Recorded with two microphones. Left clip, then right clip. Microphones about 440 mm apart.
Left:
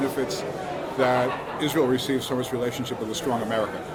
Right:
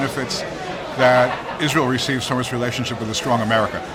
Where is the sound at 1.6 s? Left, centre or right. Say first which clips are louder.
Right 4 dB; right.